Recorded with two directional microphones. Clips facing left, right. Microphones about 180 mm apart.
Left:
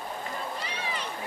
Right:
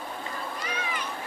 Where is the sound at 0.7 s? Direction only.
30° left (ahead or behind).